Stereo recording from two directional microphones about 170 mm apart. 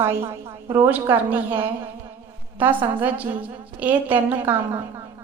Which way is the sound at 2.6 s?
10° right (ahead or behind).